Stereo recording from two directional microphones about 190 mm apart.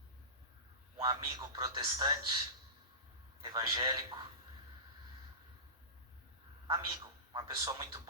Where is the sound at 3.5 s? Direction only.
25° right (ahead or behind).